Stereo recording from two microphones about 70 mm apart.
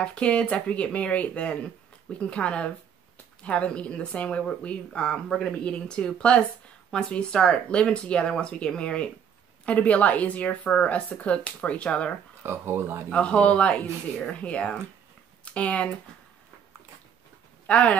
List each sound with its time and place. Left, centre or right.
0.0 s speech: centre
12.4 s speech: right
13.1 s speech: centre
17.6 s speech: centre